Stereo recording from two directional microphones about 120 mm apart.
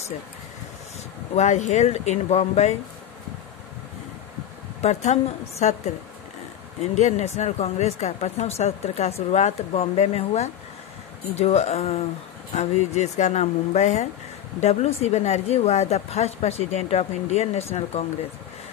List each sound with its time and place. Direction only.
1.3 s speech: 75° left (ahead or behind)
4.8 s speech: 70° left (ahead or behind)
7.0 s speech: 75° left (ahead or behind)